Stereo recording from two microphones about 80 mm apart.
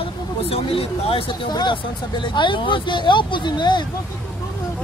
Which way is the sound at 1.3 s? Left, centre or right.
Left.